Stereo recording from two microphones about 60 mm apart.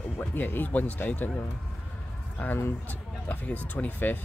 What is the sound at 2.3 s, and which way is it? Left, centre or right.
Speech, left.